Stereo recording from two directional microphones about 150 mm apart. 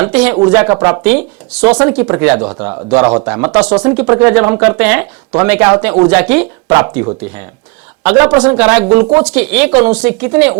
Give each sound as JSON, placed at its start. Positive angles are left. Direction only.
{"t": 0.0, "sound": "speech", "side_deg": -10}